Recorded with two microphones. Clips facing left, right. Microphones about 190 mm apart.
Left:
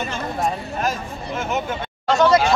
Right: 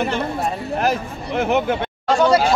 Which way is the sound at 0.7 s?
65° right (ahead or behind).